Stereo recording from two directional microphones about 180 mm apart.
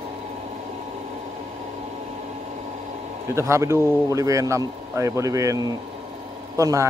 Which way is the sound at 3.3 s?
15° right (ahead or behind).